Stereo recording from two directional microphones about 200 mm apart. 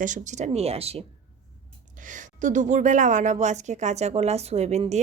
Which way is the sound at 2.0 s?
40° right (ahead or behind).